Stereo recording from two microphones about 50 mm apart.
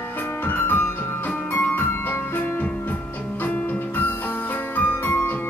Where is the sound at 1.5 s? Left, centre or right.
Left.